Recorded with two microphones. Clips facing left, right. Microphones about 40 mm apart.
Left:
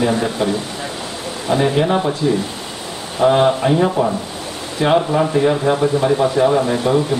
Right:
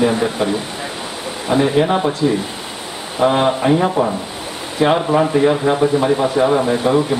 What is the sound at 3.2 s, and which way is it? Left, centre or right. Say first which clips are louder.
Speech: left 1 dB; centre.